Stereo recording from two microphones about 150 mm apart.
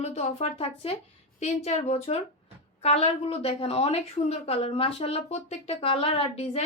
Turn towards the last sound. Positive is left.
turn(degrees=40)  # may be behind; listen again after turning